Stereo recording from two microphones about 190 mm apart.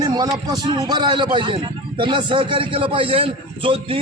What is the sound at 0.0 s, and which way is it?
A man's voice, 20° right (ahead or behind).